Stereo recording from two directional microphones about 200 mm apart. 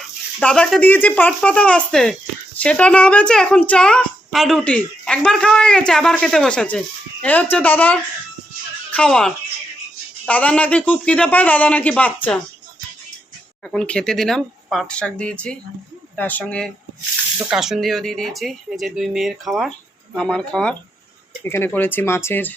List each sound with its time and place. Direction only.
0.3 s a woman's voice: 5° left (ahead or behind)
13.7 s a woman's voice: 5° left (ahead or behind)